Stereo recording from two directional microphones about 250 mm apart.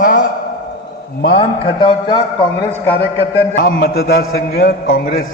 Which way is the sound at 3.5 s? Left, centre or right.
Left.